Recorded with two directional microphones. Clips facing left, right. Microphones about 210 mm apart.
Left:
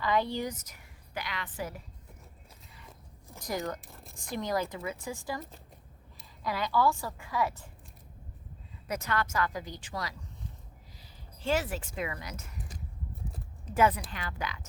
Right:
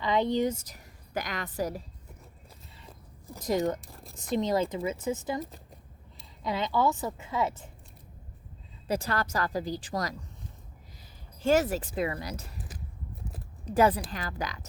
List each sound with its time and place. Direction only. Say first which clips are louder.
0.0 s a woman's voice: right 4 dB; 20° right (ahead or behind); by 1.8 s 40° right (ahead or behind)
3.4 s a woman's voice: right 7 dB; 25° right (ahead or behind)
3.8 s speech: right 3 dB; centre (ahead or behind)
4.1 s a woman's voice: right 5 dB; 20° right (ahead or behind)
6.4 s a woman's voice: right 1 dB; 20° right (ahead or behind)
8.9 s a woman's voice: right 3 dB; 35° right (ahead or behind)
11.4 s a woman's voice: right 6 dB; 45° right (ahead or behind)
13.7 s a woman's voice: right 3 dB; 35° right (ahead or behind)